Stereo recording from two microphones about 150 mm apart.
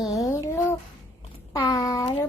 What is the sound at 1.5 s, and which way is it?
Speech, 30° left (ahead or behind).